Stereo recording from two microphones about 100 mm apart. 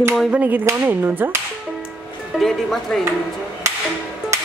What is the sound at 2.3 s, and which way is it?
Speech, centre (ahead or behind).